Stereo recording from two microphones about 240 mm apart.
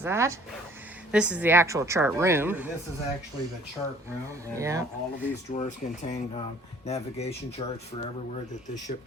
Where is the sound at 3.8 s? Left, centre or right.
Centre.